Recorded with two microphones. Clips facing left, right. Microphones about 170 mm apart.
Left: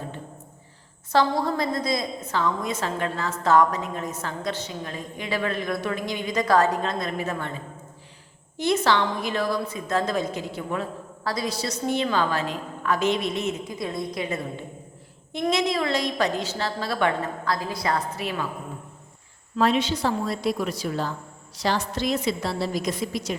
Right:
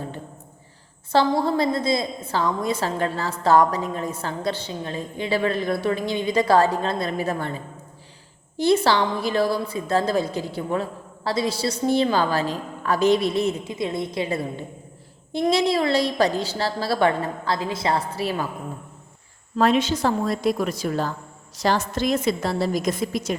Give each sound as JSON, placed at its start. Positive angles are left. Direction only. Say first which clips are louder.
{"t": 1.1, "sound": "a woman's voice", "louder": "right 2 dB", "side_deg": -30}
{"t": 8.5, "sound": "a woman's voice", "louder": "right 3 dB", "side_deg": -30}
{"t": 19.5, "sound": "a woman's voice", "louder": "right 3 dB", "side_deg": -50}